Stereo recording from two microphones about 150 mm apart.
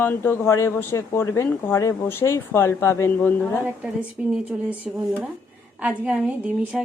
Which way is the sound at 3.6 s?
10° right (ahead or behind).